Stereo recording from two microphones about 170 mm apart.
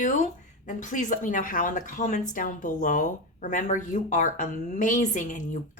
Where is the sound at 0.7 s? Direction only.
50° left (ahead or behind).